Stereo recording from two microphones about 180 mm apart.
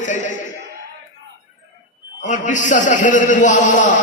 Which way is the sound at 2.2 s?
45° left (ahead or behind).